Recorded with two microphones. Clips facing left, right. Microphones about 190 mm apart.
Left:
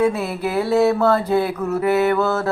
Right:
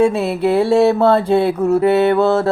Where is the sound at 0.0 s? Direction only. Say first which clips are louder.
Right 5 dB; 25° right (ahead or behind).